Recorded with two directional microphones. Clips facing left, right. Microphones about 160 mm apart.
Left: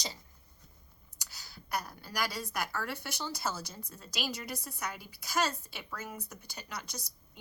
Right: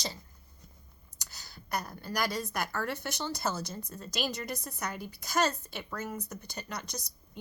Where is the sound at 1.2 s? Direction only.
10° left (ahead or behind).